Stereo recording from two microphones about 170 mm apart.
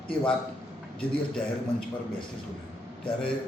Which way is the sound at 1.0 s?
5° left (ahead or behind).